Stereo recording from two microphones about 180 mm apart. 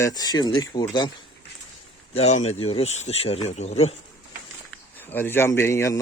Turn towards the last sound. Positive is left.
turn(degrees=15)  # may be behind; listen again after turning